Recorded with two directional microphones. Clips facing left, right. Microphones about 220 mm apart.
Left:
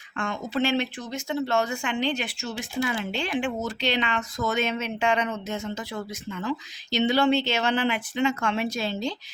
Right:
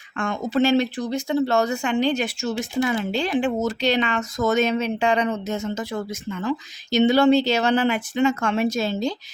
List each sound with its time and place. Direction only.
0.2 s speech: 45° right (ahead or behind)